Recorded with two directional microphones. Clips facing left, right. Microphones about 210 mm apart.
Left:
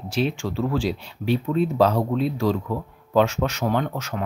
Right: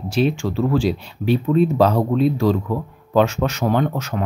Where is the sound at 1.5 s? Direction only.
50° right (ahead or behind).